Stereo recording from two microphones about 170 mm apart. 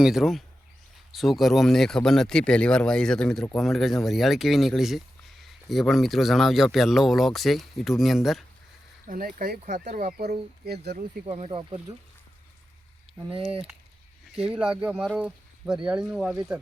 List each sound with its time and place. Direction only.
0.0 s speech: centre (ahead or behind)
9.0 s speech: 55° right (ahead or behind)
11.3 s speech: 40° right (ahead or behind)
13.1 s a sound: centre (ahead or behind)
14.3 s speech: 5° right (ahead or behind)